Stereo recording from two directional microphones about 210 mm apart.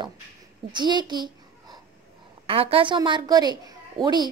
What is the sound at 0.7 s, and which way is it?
A child's voice, 20° right (ahead or behind).